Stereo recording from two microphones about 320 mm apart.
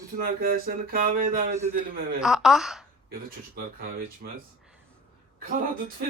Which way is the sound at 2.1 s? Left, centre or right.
Centre.